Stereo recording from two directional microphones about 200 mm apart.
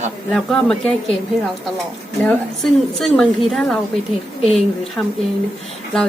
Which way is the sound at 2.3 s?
Centre (ahead or behind).